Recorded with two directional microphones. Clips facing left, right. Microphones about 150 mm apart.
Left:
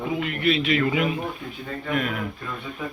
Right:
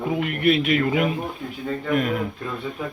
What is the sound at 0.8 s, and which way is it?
Speech, 40° right (ahead or behind).